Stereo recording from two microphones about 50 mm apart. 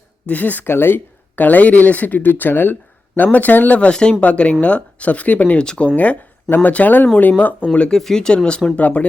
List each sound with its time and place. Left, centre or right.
0.3 s speech: left
0.6 s speech: left
1.4 s speech: left
3.8 s speech: left
5.6 s speech: centre
6.5 s speech: left
7.7 s speech: centre